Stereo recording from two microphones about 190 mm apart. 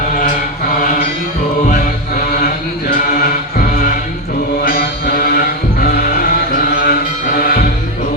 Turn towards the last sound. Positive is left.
turn(degrees=50)  # may be behind; listen again after turning